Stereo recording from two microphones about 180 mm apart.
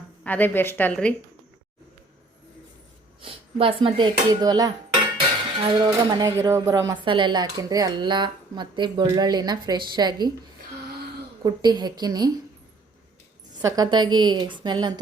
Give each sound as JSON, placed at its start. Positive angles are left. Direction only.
{"t": 0.3, "sound": "a woman's voice", "side_deg": 10}
{"t": 3.2, "sound": "speech", "side_deg": -30}
{"t": 11.4, "sound": "speech", "side_deg": -25}
{"t": 13.6, "sound": "speech", "side_deg": -20}